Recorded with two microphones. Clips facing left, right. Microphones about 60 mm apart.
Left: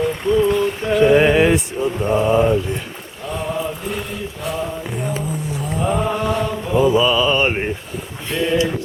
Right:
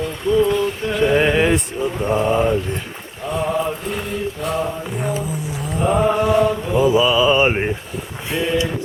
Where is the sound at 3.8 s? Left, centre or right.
Centre.